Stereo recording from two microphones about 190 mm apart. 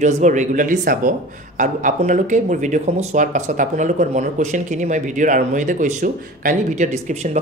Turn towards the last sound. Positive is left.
turn(degrees=-40)  # may be behind; listen again after turning